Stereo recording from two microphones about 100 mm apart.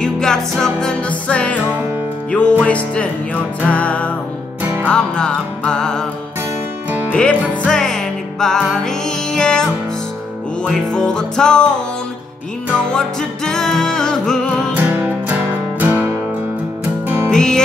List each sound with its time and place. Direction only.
0.0 s music: 5° left (ahead or behind)
2.6 s music: 10° left (ahead or behind)
7.1 s music: 10° left (ahead or behind)
12.7 s music: 5° left (ahead or behind)
14.8 s music: 20° right (ahead or behind)
17.3 s music: 5° left (ahead or behind)